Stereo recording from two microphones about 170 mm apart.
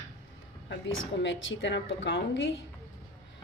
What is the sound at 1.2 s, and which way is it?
A woman's voice, 90° left.